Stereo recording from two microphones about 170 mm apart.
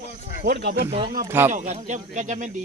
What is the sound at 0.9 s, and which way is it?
Speech, 30° right (ahead or behind).